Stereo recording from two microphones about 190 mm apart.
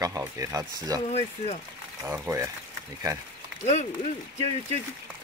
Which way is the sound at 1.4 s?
35° left (ahead or behind).